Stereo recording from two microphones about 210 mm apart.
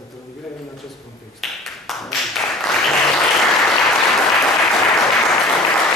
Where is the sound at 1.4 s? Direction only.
Centre (ahead or behind).